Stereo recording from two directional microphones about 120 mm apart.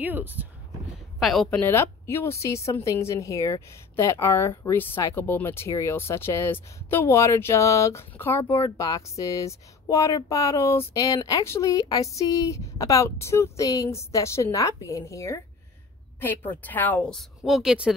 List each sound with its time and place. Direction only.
0.0 s speech: 15° right (ahead or behind)
1.2 s speech: centre (ahead or behind)
1.6 s a woman's voice: 20° left (ahead or behind)
16.2 s a woman's voice: 15° left (ahead or behind)
17.5 s speech: 5° right (ahead or behind)